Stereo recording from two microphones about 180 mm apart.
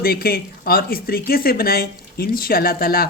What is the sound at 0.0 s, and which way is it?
Speech, 55° left (ahead or behind).